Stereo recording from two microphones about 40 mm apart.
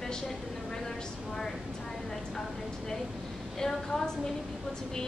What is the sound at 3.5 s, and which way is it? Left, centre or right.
Speech, centre.